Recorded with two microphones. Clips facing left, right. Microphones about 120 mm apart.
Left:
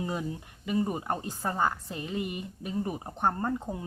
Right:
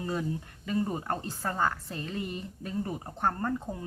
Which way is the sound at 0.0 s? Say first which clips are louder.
Right 1 dB; 15° left (ahead or behind).